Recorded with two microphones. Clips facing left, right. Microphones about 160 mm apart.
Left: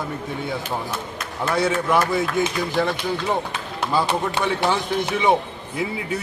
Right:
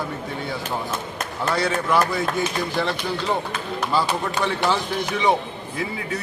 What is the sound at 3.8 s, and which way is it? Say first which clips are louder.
Speech: left 2 dB; 30° left (ahead or behind).